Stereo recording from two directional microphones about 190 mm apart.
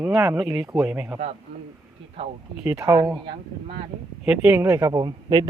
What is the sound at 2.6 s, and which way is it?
Speech, 15° right (ahead or behind).